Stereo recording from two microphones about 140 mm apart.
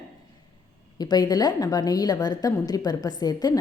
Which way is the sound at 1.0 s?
30° left (ahead or behind).